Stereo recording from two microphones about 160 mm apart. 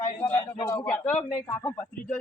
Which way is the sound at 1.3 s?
15° left (ahead or behind).